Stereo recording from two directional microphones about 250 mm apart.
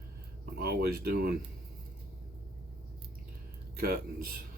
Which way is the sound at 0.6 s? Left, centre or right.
Right.